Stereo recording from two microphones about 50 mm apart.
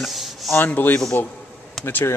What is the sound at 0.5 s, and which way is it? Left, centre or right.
Speech, left.